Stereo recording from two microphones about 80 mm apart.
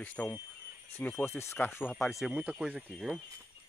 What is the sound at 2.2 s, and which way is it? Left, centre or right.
Speech, centre.